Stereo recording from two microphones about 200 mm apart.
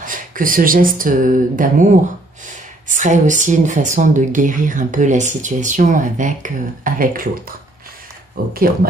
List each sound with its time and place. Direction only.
0.0 s speech: 40° right (ahead or behind)
2.9 s speech: 40° right (ahead or behind)